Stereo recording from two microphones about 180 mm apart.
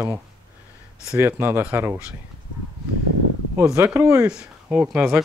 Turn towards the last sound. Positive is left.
turn(degrees=-5)  # may be behind; listen again after turning